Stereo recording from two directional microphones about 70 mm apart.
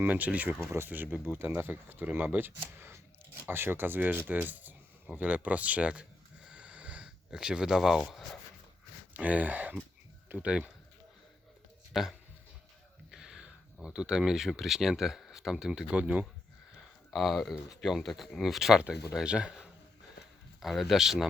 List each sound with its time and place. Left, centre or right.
0.0 s speech: right; by 8.4 s centre
9.1 s speech: right
11.9 s speech: centre
16.7 s a sound: centre
17.8 s speech: centre